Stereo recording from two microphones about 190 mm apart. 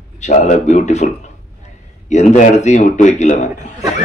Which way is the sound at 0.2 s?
40° left (ahead or behind).